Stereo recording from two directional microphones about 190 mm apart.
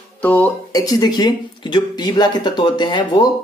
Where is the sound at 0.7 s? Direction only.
20° left (ahead or behind).